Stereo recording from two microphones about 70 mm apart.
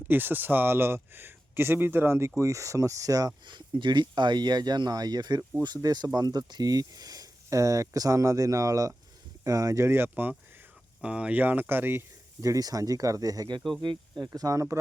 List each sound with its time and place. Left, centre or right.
0.1 s speech: right
9.8 s speech: right
11.0 s speech: centre; by 12.0 s right
12.4 s speech: right